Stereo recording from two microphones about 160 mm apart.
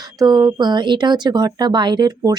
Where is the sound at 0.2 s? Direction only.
25° right (ahead or behind).